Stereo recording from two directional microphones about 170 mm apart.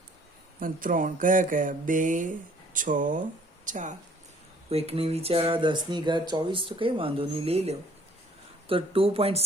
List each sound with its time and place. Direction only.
0.6 s speech: 55° right (ahead or behind)
4.7 s speech: 35° right (ahead or behind)